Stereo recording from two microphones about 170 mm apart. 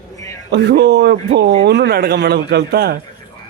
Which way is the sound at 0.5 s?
85° right.